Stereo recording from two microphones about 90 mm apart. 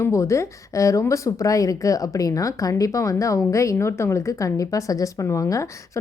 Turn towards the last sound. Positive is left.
turn(degrees=35)  # may be behind; listen again after turning